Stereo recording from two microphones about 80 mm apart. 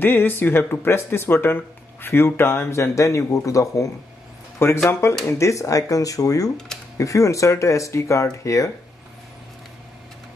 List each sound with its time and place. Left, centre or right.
0.0 s speech: left
4.6 s speech: left